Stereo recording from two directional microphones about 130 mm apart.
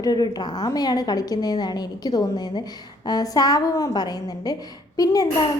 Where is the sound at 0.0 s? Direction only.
30° left (ahead or behind).